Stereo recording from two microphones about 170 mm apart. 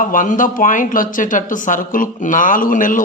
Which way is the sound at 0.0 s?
50° left (ahead or behind).